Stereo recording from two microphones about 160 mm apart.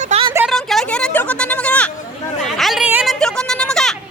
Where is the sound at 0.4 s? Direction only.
Centre (ahead or behind).